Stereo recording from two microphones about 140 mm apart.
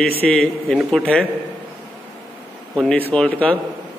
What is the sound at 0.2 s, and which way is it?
A man's voice, 5° left (ahead or behind).